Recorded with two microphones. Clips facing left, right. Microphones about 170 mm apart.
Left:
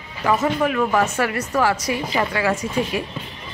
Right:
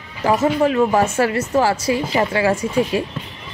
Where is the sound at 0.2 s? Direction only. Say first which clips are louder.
Right 3 dB; 30° right (ahead or behind).